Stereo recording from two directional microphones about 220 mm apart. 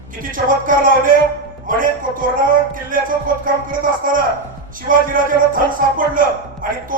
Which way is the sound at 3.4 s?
40° right (ahead or behind).